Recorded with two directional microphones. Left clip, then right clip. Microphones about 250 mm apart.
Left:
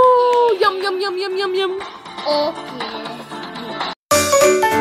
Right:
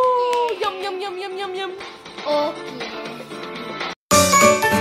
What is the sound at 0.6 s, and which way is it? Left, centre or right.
Speech, left.